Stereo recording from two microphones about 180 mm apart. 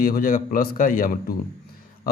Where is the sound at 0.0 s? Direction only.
55° left (ahead or behind).